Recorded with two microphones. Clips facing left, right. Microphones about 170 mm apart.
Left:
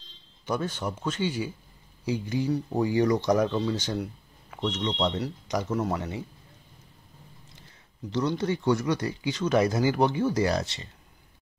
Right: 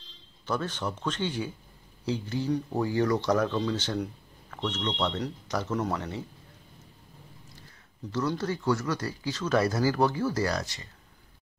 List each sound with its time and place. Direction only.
0.5 s speech: 10° left (ahead or behind)
8.4 s speech: 20° left (ahead or behind)